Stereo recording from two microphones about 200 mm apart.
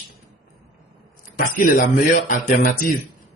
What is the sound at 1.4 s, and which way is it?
A man's voice, 45° left (ahead or behind).